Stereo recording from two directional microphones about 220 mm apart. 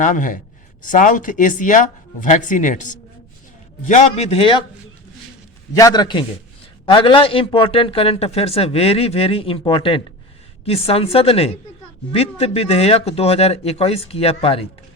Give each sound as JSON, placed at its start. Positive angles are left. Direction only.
{"t": 0.0, "sound": "a man's voice", "side_deg": 35}
{"t": 5.7, "sound": "a man's voice", "side_deg": 15}